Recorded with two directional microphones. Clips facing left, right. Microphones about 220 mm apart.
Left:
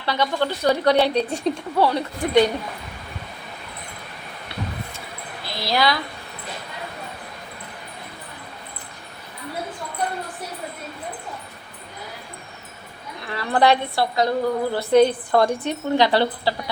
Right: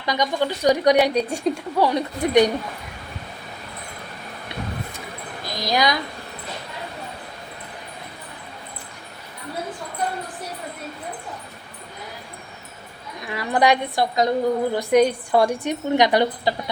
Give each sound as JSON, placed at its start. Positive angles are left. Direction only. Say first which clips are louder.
{"t": 0.0, "sound": "a woman's voice", "louder": "even", "side_deg": -15}
{"t": 5.5, "sound": "a woman's voice", "louder": "even", "side_deg": -15}
{"t": 13.2, "sound": "a woman's voice", "louder": "left 1 dB", "side_deg": -15}